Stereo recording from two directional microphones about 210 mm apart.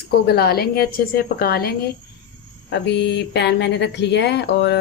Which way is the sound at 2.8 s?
55° left (ahead or behind).